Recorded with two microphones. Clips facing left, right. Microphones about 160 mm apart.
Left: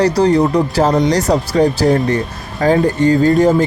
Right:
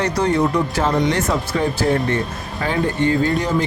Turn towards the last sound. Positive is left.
turn(degrees=45)  # may be behind; listen again after turning